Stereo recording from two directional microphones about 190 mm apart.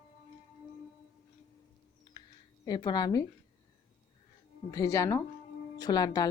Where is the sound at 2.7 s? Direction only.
20° left (ahead or behind).